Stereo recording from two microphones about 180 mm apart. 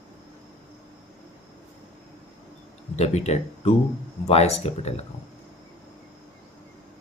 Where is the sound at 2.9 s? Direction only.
35° left (ahead or behind).